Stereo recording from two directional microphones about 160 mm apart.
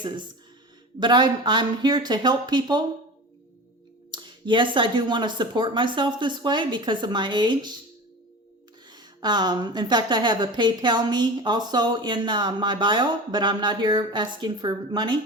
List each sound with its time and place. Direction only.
0.9 s a woman's voice: 30° right (ahead or behind)
4.1 s a woman's voice: 30° right (ahead or behind)
8.9 s a woman's voice: 25° right (ahead or behind)